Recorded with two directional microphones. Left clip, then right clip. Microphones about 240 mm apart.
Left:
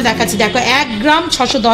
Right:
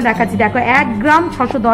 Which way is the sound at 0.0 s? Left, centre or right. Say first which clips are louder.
Even; left.